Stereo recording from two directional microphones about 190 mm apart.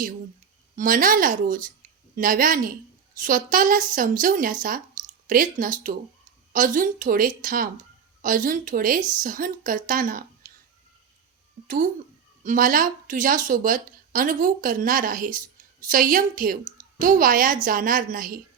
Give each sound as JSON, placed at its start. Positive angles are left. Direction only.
{"t": 0.8, "sound": "speech", "side_deg": -45}
{"t": 12.4, "sound": "speech", "side_deg": -45}